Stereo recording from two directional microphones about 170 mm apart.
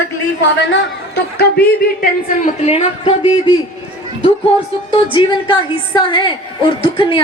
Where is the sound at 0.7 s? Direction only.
75° left (ahead or behind).